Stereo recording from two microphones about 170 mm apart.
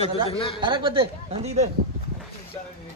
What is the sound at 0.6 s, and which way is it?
Speech, 30° right (ahead or behind).